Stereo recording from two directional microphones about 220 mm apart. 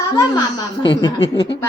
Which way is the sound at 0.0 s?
15° left (ahead or behind).